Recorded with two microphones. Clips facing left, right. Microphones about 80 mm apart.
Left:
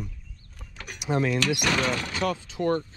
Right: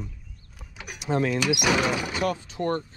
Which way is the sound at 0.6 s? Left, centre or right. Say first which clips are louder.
Right 1 dB; centre.